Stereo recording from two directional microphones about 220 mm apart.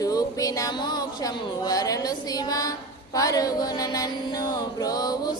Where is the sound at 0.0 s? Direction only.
15° left (ahead or behind).